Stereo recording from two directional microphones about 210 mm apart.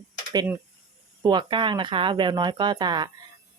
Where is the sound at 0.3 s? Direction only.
10° right (ahead or behind).